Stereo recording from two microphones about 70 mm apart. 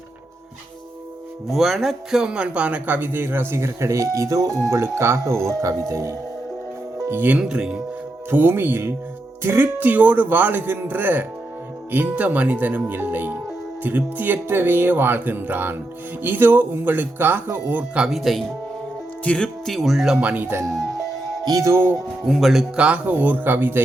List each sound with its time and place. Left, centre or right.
1.5 s speech: centre; by 4.6 s right
4.7 s speech: right
7.1 s speech: right
7.4 s speech: centre
8.3 s speech: right
18.1 s speech: centre
19.2 s speech: centre
19.6 s speech: centre
20.2 s speech: right
21.4 s music: right
21.7 s speech: right
22.3 s speech: centre
22.8 s speech: right